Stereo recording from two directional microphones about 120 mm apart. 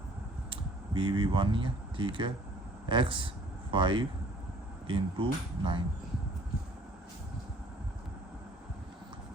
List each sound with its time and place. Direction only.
0.5 s speech: 40° right (ahead or behind)